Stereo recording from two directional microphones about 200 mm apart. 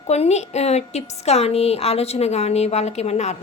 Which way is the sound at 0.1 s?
35° left (ahead or behind).